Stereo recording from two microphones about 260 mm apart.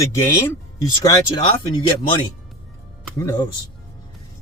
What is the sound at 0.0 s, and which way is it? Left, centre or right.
Speech, centre.